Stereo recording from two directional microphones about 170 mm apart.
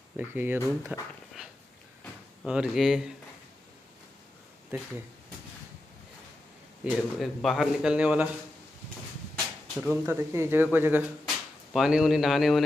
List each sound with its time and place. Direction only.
0.2 s speech: 10° right (ahead or behind)
2.4 s speech: 5° right (ahead or behind)
4.7 s speech: 15° right (ahead or behind)
6.8 s speech: centre (ahead or behind)
9.8 s speech: 10° right (ahead or behind)